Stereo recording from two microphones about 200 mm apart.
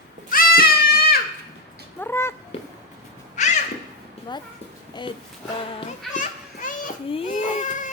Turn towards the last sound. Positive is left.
turn(degrees=35)  # may be behind; listen again after turning